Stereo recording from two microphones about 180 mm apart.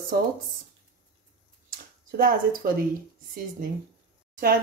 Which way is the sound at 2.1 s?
55° right (ahead or behind).